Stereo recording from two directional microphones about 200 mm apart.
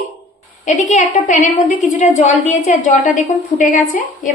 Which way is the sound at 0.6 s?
40° left (ahead or behind).